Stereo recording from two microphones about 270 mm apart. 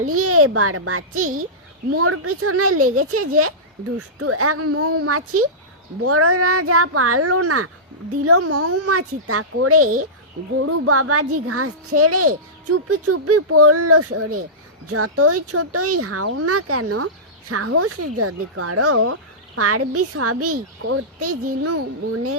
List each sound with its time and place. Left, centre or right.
0.0 s a child's voice: right